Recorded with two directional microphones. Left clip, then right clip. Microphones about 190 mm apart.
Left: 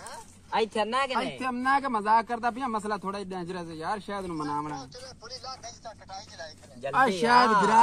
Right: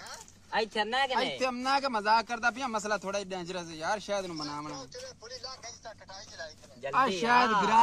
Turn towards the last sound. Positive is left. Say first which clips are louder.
# left 4 dB
turn(degrees=-5)  # may be behind; listen again after turning